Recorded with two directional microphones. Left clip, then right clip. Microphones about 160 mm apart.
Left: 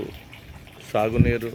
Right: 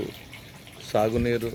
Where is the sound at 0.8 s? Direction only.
5° right (ahead or behind).